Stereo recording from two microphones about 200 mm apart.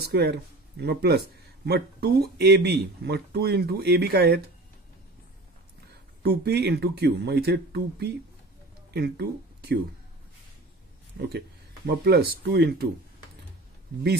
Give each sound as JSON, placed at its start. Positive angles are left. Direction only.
{"t": 0.0, "sound": "speech", "side_deg": -55}
{"t": 6.2, "sound": "speech", "side_deg": -55}
{"t": 11.1, "sound": "speech", "side_deg": -55}